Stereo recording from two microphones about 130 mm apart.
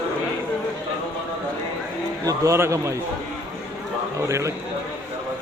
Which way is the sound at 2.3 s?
25° right (ahead or behind).